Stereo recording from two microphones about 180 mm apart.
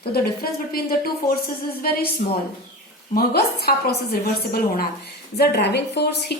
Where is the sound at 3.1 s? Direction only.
60° left (ahead or behind).